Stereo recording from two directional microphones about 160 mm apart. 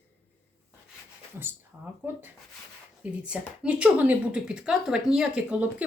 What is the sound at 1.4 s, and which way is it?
Speech, 15° right (ahead or behind).